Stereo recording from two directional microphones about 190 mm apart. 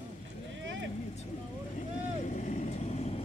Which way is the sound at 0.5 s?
80° right.